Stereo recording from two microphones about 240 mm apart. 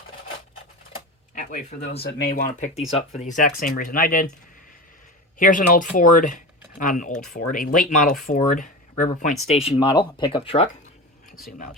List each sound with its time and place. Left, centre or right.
1.4 s speech: left
5.4 s speech: left
9.6 s speech: left